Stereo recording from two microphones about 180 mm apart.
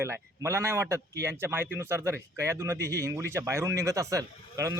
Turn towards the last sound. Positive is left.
turn(degrees=-20)  # may be behind; listen again after turning